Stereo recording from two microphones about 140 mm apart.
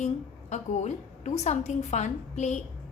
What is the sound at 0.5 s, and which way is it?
A woman's voice, 55° left (ahead or behind).